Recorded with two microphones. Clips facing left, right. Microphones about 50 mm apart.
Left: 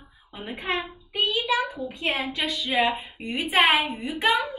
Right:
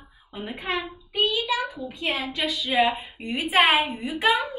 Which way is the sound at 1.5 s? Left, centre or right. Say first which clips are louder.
Left 2 dB; left.